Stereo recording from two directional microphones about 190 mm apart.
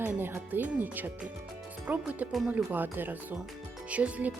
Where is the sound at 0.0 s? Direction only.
10° right (ahead or behind).